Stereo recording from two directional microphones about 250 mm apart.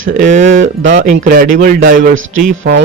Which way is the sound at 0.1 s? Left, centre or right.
Right.